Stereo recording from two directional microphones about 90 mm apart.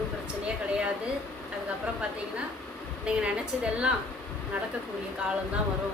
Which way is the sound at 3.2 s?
10° right (ahead or behind).